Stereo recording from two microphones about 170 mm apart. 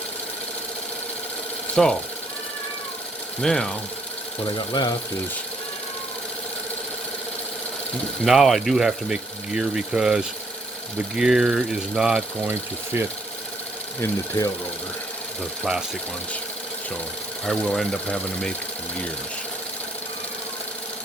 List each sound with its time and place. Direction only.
1.7 s speech: 5° left (ahead or behind)
3.4 s speech: 5° left (ahead or behind)
4.4 s speech: 25° left (ahead or behind)
8.2 s speech: centre (ahead or behind)
12.5 s speech: 15° right (ahead or behind)
14.0 s speech: 20° left (ahead or behind)
17.4 s speech: 5° left (ahead or behind)